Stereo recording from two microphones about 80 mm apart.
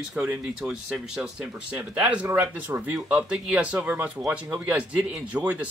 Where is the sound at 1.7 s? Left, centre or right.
Centre.